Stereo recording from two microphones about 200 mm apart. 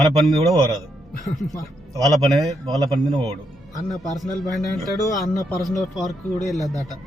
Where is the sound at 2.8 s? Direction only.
20° right (ahead or behind).